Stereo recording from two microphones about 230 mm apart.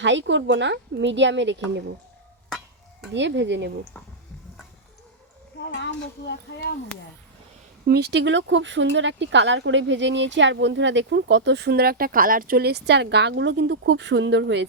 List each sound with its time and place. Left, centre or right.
0.0 s speech: right
3.1 s speech: right
7.9 s speech: right